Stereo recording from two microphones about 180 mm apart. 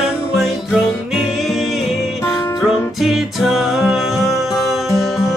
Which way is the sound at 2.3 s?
15° left (ahead or behind).